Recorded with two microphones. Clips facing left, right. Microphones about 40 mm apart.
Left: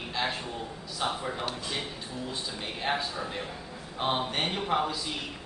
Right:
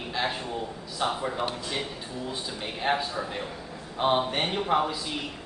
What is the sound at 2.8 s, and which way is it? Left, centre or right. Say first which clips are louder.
A man's voice: right 4 dB; centre.